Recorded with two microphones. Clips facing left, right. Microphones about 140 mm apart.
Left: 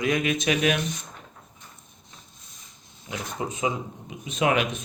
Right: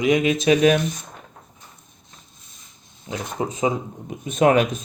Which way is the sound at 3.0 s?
35° right (ahead or behind).